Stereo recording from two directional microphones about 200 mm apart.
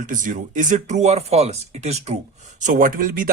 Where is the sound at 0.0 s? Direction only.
40° right (ahead or behind).